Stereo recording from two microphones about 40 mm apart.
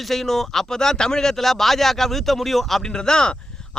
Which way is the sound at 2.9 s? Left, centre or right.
Centre.